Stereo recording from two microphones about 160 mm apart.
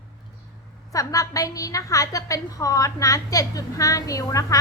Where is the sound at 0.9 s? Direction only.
20° left (ahead or behind).